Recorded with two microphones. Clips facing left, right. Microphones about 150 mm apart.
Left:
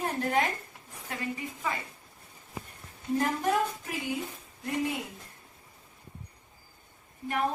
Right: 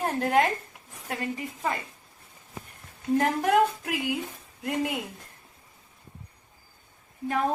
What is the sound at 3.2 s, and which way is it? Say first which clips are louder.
Speech: right 5 dB; 70° right (ahead or behind).